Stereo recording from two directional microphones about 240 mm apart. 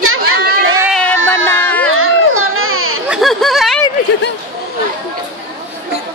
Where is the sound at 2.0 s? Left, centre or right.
Right.